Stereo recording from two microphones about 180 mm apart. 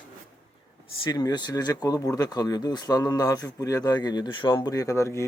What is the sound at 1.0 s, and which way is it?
Speech, 20° left (ahead or behind).